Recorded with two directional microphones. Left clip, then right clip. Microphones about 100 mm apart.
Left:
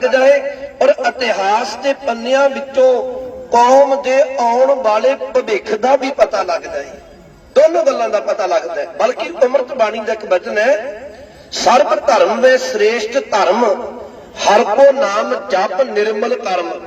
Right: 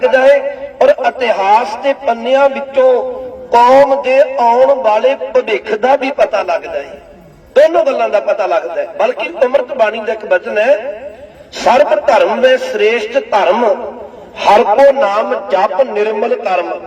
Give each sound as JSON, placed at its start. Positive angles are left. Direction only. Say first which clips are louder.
{"t": 0.0, "sound": "a man's voice", "louder": "right 2 dB", "side_deg": -35}